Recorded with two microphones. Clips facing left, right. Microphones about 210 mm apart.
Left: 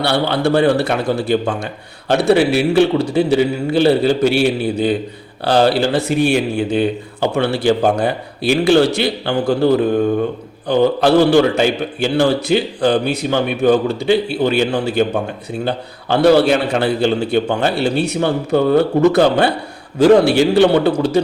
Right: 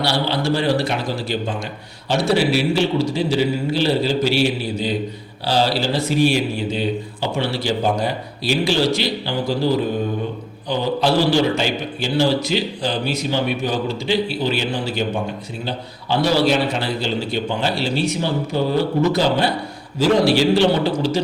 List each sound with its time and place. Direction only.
0.0 s a man's voice: 60° left (ahead or behind)
5.5 s a man's voice: 55° left (ahead or behind)